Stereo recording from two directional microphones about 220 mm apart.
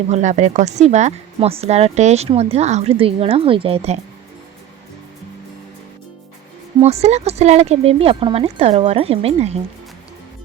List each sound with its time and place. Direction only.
0.1 s speech: 35° right (ahead or behind)
6.7 s speech: 30° right (ahead or behind)